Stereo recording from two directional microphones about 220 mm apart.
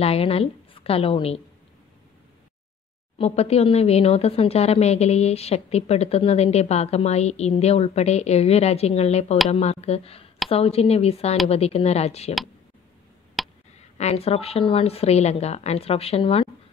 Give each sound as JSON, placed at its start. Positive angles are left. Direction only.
{"t": 0.0, "sound": "speech", "side_deg": 25}
{"t": 3.2, "sound": "speech", "side_deg": 30}
{"t": 13.4, "sound": "finger snapping", "side_deg": 0}
{"t": 13.9, "sound": "speech", "side_deg": 30}